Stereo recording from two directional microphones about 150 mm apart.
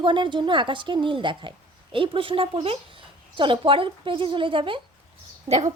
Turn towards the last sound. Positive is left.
turn(degrees=-45)  # may be behind; listen again after turning